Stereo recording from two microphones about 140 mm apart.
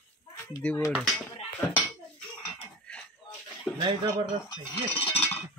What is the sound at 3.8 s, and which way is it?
Speech, 40° right (ahead or behind).